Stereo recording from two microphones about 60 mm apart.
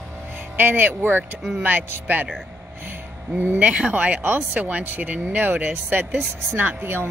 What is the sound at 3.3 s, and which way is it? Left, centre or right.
Speech, right.